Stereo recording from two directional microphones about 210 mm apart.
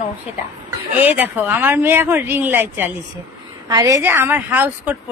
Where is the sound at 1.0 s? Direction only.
10° right (ahead or behind).